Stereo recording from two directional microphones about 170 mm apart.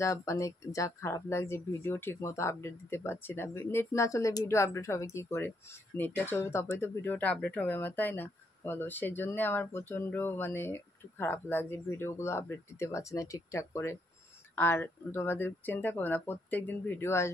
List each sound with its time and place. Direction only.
0.0 s speech: 20° left (ahead or behind)